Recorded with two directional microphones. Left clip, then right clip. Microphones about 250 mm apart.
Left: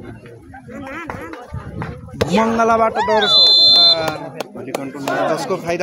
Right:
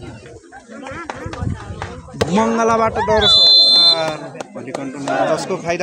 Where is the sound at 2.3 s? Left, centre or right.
Centre.